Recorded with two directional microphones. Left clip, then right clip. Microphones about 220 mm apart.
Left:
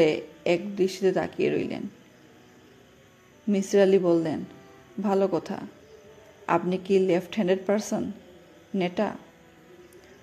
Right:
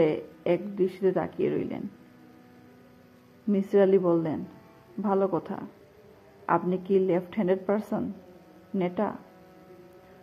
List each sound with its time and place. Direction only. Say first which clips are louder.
0.0 s speech: left 2 dB; 25° left (ahead or behind)
3.5 s speech: left 1 dB; 20° left (ahead or behind)